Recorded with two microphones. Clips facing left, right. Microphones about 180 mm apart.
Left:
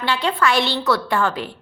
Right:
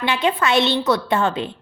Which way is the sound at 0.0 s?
20° right (ahead or behind).